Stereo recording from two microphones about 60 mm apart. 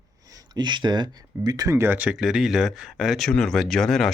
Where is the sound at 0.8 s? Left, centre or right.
Right.